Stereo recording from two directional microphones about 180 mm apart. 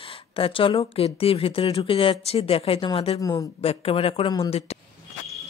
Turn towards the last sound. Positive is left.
turn(degrees=35)  # may be behind; listen again after turning